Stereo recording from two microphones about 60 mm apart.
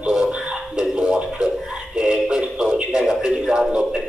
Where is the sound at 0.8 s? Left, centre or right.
Centre.